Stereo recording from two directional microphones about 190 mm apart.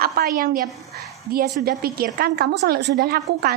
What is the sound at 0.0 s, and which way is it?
A woman's voice, 50° right (ahead or behind).